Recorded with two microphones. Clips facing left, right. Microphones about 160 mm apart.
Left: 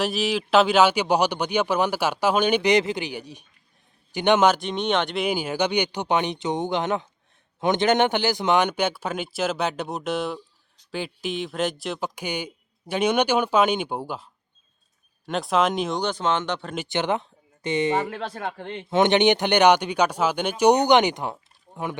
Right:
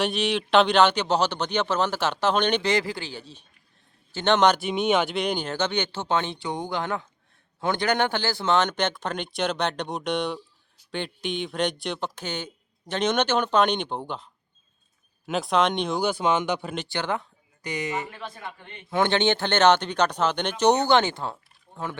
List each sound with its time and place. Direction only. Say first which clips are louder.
0.0 s speech: left 1 dB; centre (ahead or behind)
4.6 s speech: right 1 dB; 5° right (ahead or behind)
15.3 s speech: left 1 dB; centre (ahead or behind)
16.9 s speech: left 5 dB; 20° left (ahead or behind)
18.1 s speech: left 7 dB; 80° left
18.9 s speech: left 4 dB; 20° left (ahead or behind)